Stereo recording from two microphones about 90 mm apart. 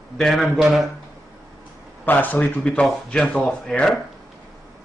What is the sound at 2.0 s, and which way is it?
Speech, 20° left (ahead or behind).